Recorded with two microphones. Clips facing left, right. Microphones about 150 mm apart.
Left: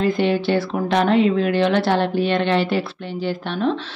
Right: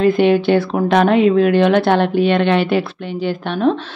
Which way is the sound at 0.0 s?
55° right (ahead or behind).